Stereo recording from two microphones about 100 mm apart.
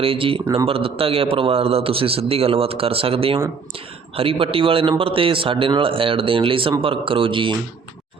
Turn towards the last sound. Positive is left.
turn(degrees=-55)  # may be behind; listen again after turning